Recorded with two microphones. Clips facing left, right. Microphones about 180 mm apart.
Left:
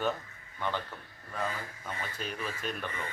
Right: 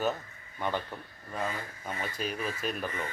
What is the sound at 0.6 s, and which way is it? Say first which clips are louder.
Speech: right 2 dB; 15° right (ahead or behind).